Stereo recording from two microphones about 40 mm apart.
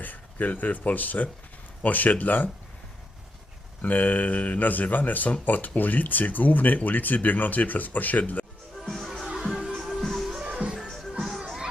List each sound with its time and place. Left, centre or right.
0.0 s speech: left
3.8 s speech: left
8.8 s music: centre
9.4 s music: centre
10.0 s music: centre
10.4 s music: right
10.8 s music: centre